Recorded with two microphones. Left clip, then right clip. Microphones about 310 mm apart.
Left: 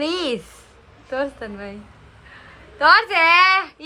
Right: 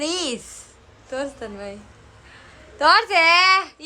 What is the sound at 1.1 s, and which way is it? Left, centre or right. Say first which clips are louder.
A woman's voice: left 3 dB; centre.